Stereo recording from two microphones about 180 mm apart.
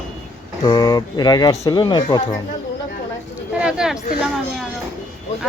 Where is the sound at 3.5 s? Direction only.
5° right (ahead or behind).